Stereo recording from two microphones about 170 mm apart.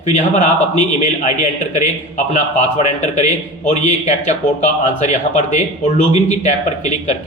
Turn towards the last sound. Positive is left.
turn(degrees=45)  # may be behind; listen again after turning